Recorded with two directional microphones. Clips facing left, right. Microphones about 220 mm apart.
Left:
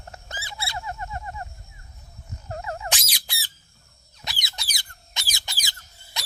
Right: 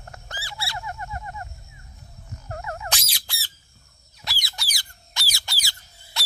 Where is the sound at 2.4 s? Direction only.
25° left (ahead or behind).